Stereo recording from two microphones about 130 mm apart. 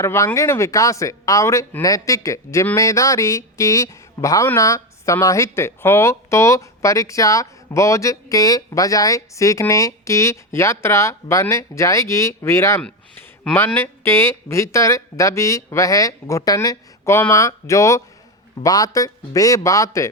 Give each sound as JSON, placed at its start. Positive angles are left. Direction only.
{"t": 0.0, "sound": "speech", "side_deg": 20}
{"t": 12.8, "sound": "speech", "side_deg": 10}